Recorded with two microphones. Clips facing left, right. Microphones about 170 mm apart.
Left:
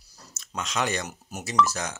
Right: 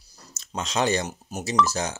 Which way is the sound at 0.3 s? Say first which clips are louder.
Right 3 dB; 30° right (ahead or behind).